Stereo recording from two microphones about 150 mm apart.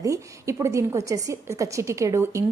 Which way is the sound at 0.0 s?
20° right (ahead or behind).